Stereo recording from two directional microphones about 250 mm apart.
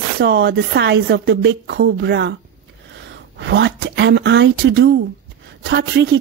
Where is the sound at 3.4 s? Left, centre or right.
Right.